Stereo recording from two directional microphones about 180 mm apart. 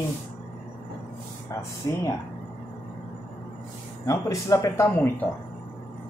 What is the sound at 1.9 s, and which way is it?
Speech, 20° left (ahead or behind).